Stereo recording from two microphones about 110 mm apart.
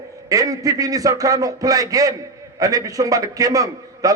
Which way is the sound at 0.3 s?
35° right (ahead or behind).